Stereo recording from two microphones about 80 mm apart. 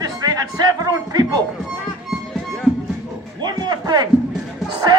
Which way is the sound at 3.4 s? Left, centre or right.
Right.